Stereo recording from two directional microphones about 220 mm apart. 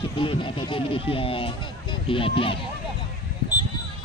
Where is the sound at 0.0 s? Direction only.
25° left (ahead or behind).